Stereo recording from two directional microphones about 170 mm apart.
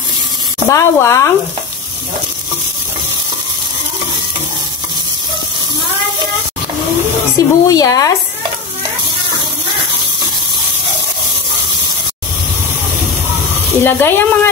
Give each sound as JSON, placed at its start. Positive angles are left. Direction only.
{"t": 0.7, "sound": "speech", "side_deg": 15}
{"t": 7.3, "sound": "speech", "side_deg": 20}
{"t": 13.7, "sound": "speech", "side_deg": 15}